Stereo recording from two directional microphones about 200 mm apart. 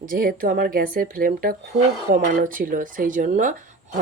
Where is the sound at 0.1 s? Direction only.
45° right (ahead or behind).